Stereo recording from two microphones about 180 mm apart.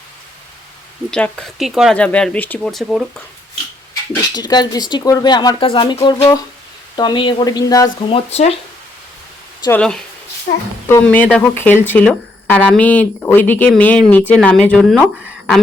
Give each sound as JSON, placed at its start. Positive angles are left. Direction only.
{"t": 1.1, "sound": "speech", "side_deg": 5}
{"t": 4.1, "sound": "speech", "side_deg": 25}
{"t": 8.3, "sound": "speech", "side_deg": 35}
{"t": 9.6, "sound": "speech", "side_deg": 5}